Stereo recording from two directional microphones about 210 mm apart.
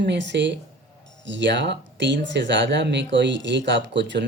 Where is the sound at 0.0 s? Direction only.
55° right (ahead or behind).